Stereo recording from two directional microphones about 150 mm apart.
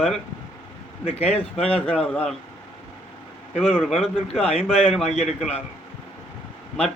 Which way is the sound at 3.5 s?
Centre (ahead or behind).